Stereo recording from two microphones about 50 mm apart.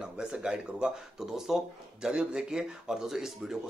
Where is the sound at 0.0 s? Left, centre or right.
Centre.